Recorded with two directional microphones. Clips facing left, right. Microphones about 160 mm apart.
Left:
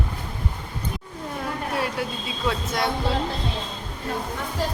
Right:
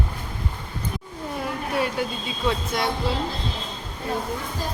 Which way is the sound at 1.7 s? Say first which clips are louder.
Right 3 dB; centre (ahead or behind).